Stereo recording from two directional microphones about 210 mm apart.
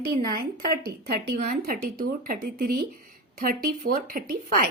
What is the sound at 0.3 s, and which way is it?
A woman's voice, 45° right (ahead or behind).